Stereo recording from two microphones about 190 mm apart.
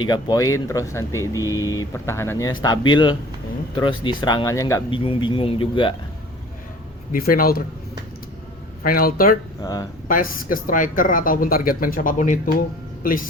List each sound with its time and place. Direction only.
0.0 s speech: 20° left (ahead or behind)
7.1 s speech: 50° left (ahead or behind)
8.8 s speech: 50° left (ahead or behind)